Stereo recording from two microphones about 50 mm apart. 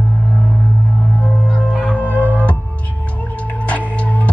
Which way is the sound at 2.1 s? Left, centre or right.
Right.